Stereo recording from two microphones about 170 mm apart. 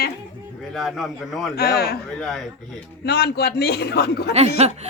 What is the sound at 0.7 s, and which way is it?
Speech, centre (ahead or behind).